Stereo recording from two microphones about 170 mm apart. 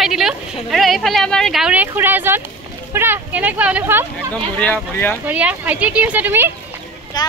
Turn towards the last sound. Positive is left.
turn(degrees=25)  # may be behind; listen again after turning